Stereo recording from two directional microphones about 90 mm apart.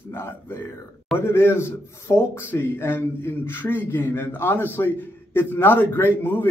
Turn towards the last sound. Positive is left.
turn(degrees=20)  # may be behind; listen again after turning